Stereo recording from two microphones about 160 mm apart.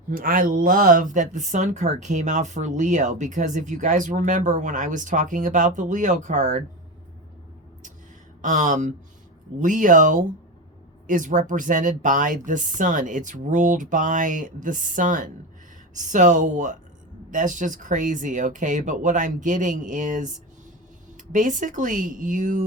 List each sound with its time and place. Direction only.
0.1 s speech: 60° right (ahead or behind)
8.4 s speech: 50° right (ahead or behind)
21.3 s speech: 55° right (ahead or behind)